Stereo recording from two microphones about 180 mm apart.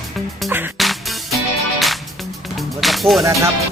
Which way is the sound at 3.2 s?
15° right (ahead or behind).